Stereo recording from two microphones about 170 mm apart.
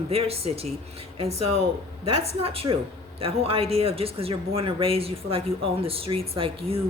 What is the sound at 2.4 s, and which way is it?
Speech, 35° right (ahead or behind).